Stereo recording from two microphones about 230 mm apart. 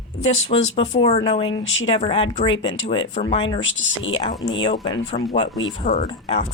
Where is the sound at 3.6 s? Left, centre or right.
Left.